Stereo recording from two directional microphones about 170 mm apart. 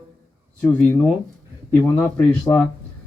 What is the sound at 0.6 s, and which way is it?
Speech, 10° left (ahead or behind).